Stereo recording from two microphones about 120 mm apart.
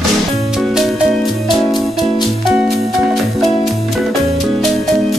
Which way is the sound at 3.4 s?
Centre (ahead or behind).